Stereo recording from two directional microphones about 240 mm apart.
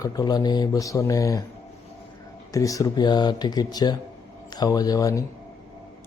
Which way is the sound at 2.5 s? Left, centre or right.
Centre.